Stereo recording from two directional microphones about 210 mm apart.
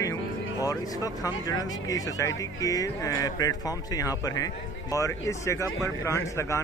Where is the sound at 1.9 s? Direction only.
15° left (ahead or behind).